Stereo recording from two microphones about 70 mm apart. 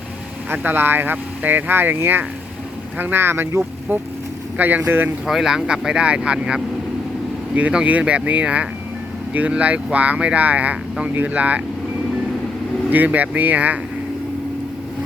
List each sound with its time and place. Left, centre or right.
0.5 s speech: right
5.2 s speech: centre; by 11.6 s right
12.9 s speech: right